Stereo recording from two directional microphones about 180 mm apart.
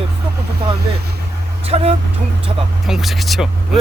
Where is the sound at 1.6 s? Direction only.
35° right (ahead or behind).